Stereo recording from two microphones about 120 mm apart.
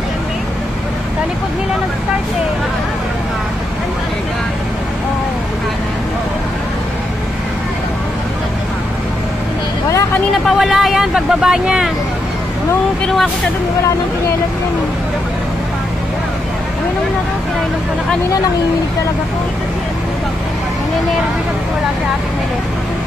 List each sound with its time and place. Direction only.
9.8 s vehicle: 25° left (ahead or behind)
10.4 s speech: centre (ahead or behind)
13.0 s speech: centre (ahead or behind)